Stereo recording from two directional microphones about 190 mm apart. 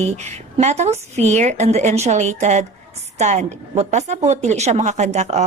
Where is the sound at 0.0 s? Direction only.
35° right (ahead or behind).